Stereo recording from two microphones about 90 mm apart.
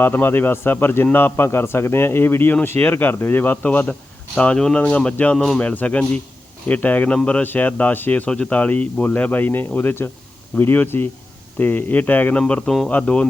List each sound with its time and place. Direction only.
0.0 s speech: 25° left (ahead or behind); by 12.9 s 5° left (ahead or behind)
12.9 s speech: 15° left (ahead or behind)